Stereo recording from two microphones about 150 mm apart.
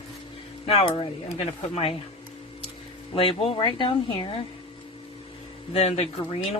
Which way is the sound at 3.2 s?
40° left (ahead or behind).